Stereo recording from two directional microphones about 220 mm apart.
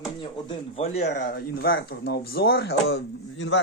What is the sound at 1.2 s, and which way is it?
A man's voice, 45° left (ahead or behind).